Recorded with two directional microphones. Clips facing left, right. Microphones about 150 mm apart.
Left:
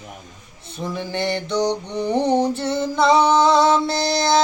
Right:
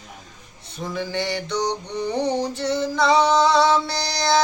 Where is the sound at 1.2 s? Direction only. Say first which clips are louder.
Left 4 dB; 50° left (ahead or behind).